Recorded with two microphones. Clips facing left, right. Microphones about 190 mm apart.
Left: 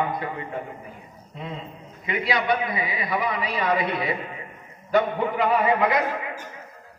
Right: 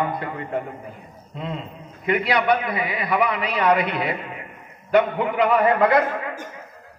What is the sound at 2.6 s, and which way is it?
Speech, 25° left (ahead or behind).